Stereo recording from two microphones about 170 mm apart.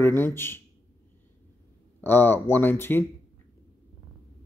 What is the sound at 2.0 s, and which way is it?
Speech, 10° left (ahead or behind).